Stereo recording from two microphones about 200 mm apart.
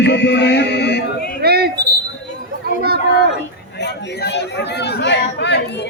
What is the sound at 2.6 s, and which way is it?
Children playing, 55° right (ahead or behind).